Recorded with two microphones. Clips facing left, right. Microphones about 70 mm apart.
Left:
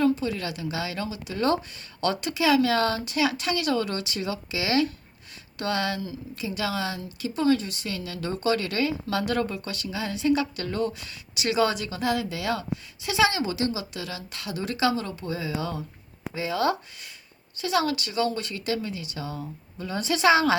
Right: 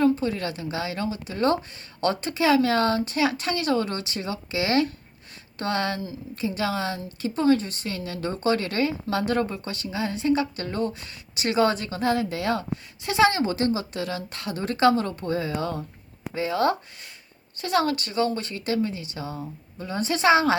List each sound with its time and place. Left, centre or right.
0.0 s speech: right